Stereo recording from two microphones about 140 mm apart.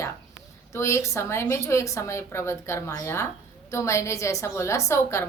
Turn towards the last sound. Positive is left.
turn(degrees=20)  # may be behind; listen again after turning